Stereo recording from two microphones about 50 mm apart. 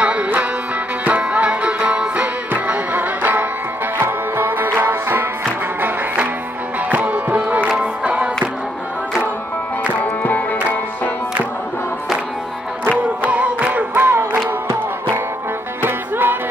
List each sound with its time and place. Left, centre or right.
0.0 s music: right
2.5 s music: right
6.9 s music: right
9.9 s music: left
13.2 s music: right
15.8 s music: right